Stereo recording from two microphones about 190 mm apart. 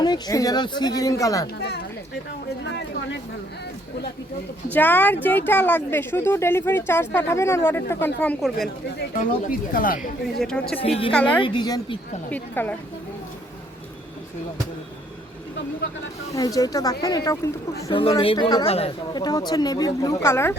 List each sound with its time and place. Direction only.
0.0 s speech: 20° left (ahead or behind)
1.5 s speech: 60° left (ahead or behind)
4.7 s speech: 10° left (ahead or behind)
9.4 s speech: 50° left (ahead or behind)
10.4 s speech: 5° left (ahead or behind)
10.8 s a woman's voice: 30° left (ahead or behind)
11.1 s speech: 5° left (ahead or behind)
11.4 s speech: 25° left (ahead or behind)
12.3 s speech: 10° left (ahead or behind)
16.6 s speech: 20° left (ahead or behind)
17.9 s speech: 30° left (ahead or behind); by 20.6 s 15° left (ahead or behind)